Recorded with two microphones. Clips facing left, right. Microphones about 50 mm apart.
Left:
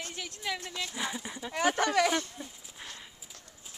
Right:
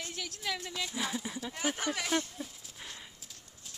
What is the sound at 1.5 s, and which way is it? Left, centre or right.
Speech, left.